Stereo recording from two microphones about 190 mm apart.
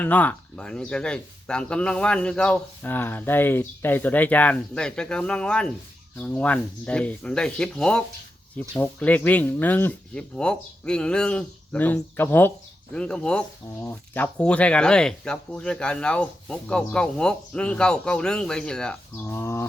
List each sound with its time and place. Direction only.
0.0 s speech: 10° left (ahead or behind)